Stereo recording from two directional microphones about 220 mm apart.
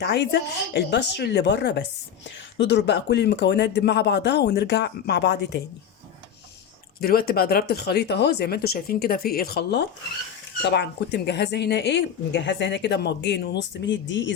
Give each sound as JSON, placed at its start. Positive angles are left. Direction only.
{"t": 0.0, "sound": "speech", "side_deg": 50}
{"t": 7.0, "sound": "speech", "side_deg": 45}